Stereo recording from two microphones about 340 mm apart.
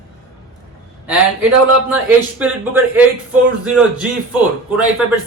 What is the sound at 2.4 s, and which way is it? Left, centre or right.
Speech, centre.